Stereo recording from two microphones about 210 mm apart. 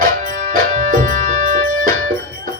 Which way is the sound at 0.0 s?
40° right (ahead or behind).